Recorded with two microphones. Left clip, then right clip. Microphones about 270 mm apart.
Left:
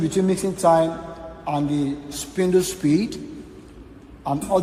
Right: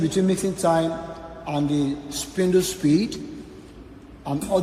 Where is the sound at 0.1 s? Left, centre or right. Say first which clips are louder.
Left 1 dB; left.